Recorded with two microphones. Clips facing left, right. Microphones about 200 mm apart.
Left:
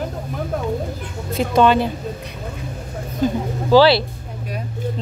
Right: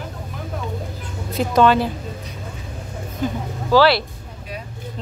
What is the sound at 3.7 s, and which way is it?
Speech, 30° left (ahead or behind).